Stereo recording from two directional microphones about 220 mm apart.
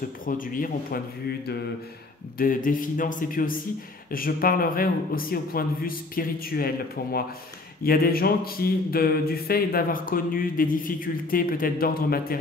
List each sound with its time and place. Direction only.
0.2 s speech: 40° left (ahead or behind)